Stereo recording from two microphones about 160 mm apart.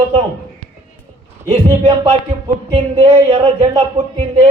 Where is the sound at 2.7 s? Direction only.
35° right (ahead or behind).